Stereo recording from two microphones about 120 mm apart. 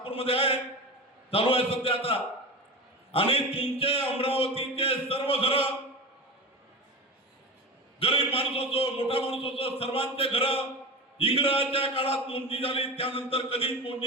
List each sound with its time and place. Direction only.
0.0 s a man's voice: 50° left (ahead or behind)
7.9 s a man's voice: 50° left (ahead or behind)